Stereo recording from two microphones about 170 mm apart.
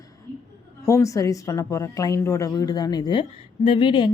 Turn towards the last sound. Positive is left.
turn(degrees=30)  # may be behind; listen again after turning